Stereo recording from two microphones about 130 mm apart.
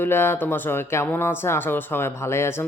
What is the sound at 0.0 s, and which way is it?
Speech, 15° left (ahead or behind).